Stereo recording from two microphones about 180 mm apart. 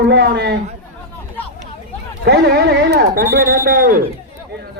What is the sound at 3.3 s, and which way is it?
Speech, 50° right (ahead or behind).